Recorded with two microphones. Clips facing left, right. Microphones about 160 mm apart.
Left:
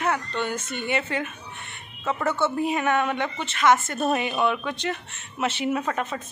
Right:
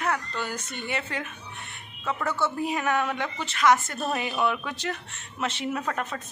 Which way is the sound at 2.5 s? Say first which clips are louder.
Left 3 dB; centre (ahead or behind).